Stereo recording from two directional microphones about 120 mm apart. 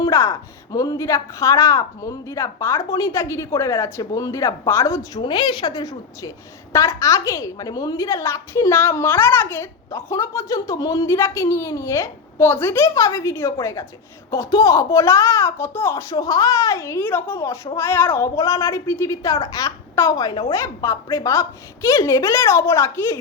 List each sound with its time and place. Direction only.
0.0 s a woman's voice: 25° left (ahead or behind)
5.2 s a woman's voice: 40° left (ahead or behind); by 23.1 s 20° left (ahead or behind)